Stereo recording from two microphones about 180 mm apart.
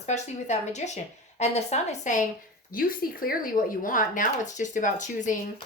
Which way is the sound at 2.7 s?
55° left (ahead or behind).